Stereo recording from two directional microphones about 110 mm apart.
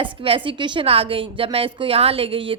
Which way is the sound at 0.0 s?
55° right (ahead or behind).